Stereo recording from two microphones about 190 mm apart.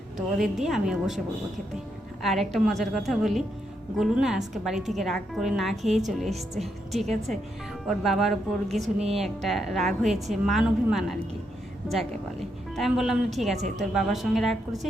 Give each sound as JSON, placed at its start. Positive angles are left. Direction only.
{"t": 0.3, "sound": "a woman's voice", "side_deg": 0}
{"t": 2.2, "sound": "a woman's voice", "side_deg": 0}
{"t": 8.8, "sound": "a woman's voice", "side_deg": -35}
{"t": 9.1, "sound": "a woman's voice", "side_deg": 0}
{"t": 12.7, "sound": "a woman's voice", "side_deg": 0}